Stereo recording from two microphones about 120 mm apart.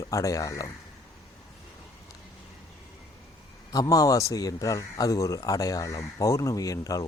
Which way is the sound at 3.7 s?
30° left (ahead or behind).